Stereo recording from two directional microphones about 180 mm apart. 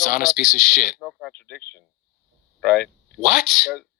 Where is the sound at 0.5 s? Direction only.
50° left (ahead or behind).